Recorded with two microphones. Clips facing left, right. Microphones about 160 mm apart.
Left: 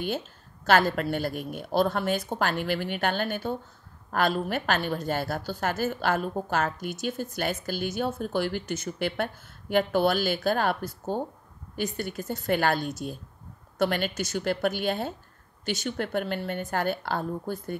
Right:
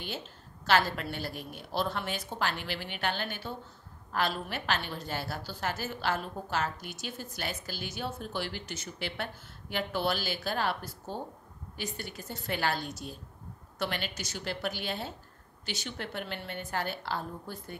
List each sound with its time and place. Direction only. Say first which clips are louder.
0.7 s a woman's voice: left 5 dB; 50° left (ahead or behind)